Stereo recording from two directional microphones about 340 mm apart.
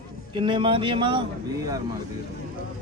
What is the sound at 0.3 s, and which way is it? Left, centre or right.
Speech, centre.